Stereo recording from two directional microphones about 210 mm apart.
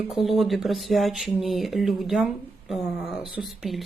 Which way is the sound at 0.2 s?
Centre (ahead or behind).